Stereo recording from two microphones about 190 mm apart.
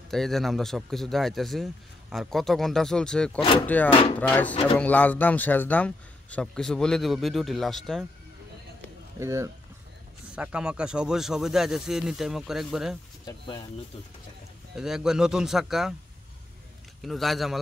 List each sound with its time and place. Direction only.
0.1 s speech: centre (ahead or behind)
9.2 s speech: 15° right (ahead or behind)
10.3 s speech: 5° right (ahead or behind)
13.2 s speech: 20° left (ahead or behind)
14.8 s speech: 5° right (ahead or behind)
17.0 s speech: centre (ahead or behind)